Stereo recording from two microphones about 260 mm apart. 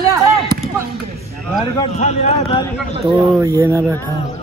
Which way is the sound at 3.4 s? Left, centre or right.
Centre.